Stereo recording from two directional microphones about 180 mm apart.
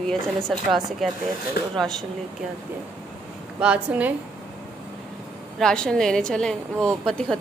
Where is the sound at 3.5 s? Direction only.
5° right (ahead or behind).